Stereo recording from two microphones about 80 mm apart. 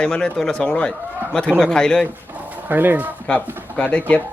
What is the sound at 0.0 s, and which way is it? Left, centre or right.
Speech, centre.